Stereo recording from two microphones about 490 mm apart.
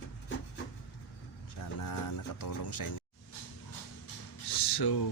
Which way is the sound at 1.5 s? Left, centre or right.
Left.